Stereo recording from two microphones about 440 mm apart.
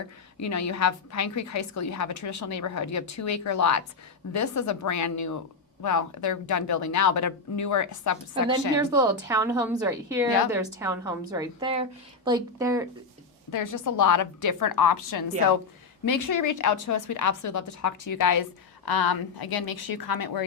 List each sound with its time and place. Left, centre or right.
0.3 s a woman's voice: left
8.8 s a woman's voice: centre
13.5 s a woman's voice: left